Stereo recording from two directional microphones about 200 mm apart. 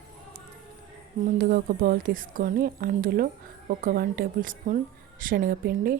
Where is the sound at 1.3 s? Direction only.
45° right (ahead or behind).